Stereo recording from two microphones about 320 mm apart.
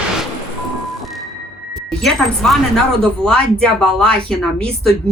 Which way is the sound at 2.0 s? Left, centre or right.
Centre.